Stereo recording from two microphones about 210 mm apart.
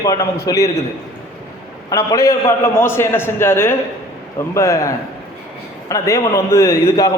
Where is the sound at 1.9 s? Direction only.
15° left (ahead or behind).